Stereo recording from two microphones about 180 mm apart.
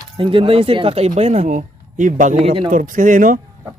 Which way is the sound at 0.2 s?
30° right (ahead or behind).